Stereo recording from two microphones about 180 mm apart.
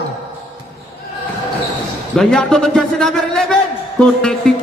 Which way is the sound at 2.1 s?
5° left (ahead or behind).